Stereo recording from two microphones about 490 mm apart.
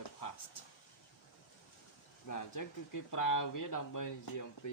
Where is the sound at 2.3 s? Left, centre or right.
Left.